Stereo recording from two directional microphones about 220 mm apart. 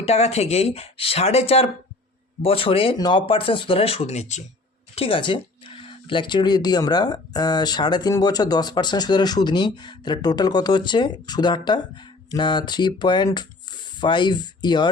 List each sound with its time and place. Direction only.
0.0 s speech: 30° left (ahead or behind)